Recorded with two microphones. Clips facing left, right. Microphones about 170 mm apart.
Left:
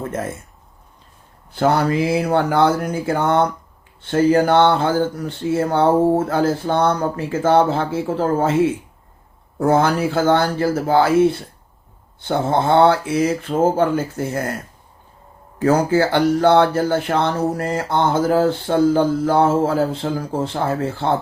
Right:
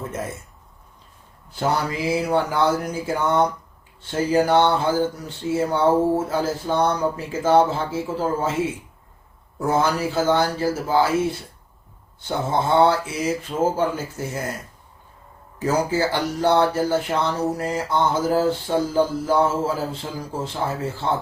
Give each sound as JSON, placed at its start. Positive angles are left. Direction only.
{"t": 1.5, "sound": "speech", "side_deg": 60}
{"t": 9.6, "sound": "speech", "side_deg": 60}
{"t": 12.3, "sound": "speech", "side_deg": 60}
{"t": 15.5, "sound": "speech", "side_deg": 60}